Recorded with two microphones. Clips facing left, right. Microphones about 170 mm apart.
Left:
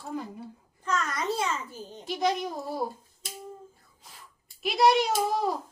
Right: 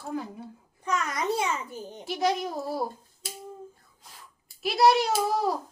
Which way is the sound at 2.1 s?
5° right (ahead or behind).